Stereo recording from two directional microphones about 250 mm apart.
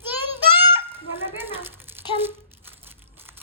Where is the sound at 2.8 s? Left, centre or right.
Centre.